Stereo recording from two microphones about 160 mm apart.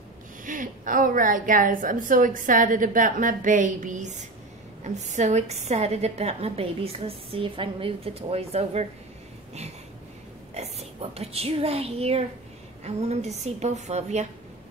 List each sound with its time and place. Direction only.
0.5 s a woman's voice: 55° right (ahead or behind); by 8.8 s 40° right (ahead or behind)
10.5 s a woman's voice: 40° right (ahead or behind)